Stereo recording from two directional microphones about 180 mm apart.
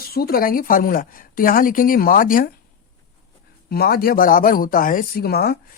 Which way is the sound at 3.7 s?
60° left (ahead or behind).